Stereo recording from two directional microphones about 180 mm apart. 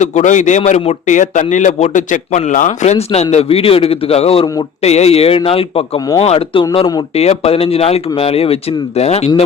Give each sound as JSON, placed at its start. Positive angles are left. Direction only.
{"t": 0.0, "sound": "a man's voice", "side_deg": 40}